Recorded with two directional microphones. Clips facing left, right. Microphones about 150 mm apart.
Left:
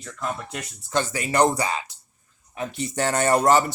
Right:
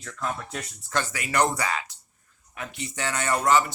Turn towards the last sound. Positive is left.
turn(degrees=40)  # may be behind; listen again after turning